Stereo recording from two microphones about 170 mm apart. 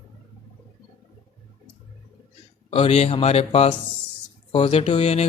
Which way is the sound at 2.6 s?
35° left (ahead or behind).